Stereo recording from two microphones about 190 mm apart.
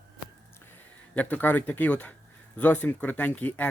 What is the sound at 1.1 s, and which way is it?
Speech, 10° left (ahead or behind).